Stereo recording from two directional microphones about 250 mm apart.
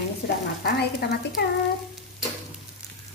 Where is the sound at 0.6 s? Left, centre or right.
Left.